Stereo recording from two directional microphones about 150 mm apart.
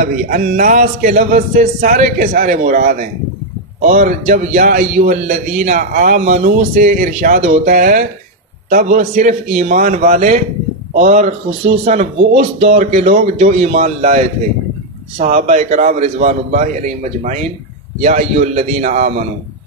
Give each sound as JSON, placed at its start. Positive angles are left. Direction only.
{"t": 0.0, "sound": "a man's voice", "side_deg": -60}
{"t": 3.8, "sound": "a man's voice", "side_deg": -55}